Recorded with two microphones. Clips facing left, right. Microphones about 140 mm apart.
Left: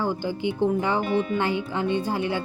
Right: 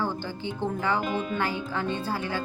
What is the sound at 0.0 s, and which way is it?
Speech, 15° left (ahead or behind).